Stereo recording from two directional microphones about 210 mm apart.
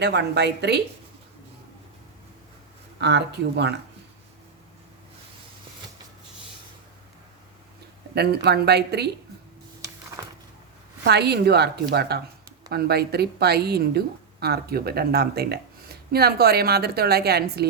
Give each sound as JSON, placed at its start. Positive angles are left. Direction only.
{"t": 0.0, "sound": "a woman's voice", "side_deg": -55}
{"t": 3.0, "sound": "a woman's voice", "side_deg": -55}
{"t": 8.1, "sound": "a woman's voice", "side_deg": -50}
{"t": 11.0, "sound": "a woman's voice", "side_deg": -50}